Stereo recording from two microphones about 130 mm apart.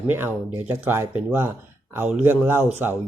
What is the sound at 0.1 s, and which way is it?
Speech, 15° right (ahead or behind).